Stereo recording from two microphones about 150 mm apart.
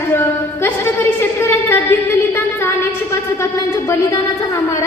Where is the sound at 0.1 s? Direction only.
15° left (ahead or behind).